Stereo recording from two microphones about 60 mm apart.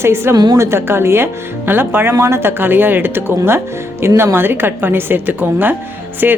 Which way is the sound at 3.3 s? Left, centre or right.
Right.